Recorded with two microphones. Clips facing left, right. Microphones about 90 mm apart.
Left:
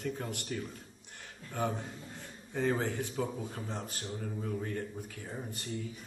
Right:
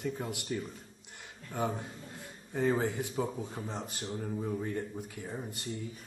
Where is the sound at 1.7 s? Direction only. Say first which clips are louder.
Even; 5° right (ahead or behind).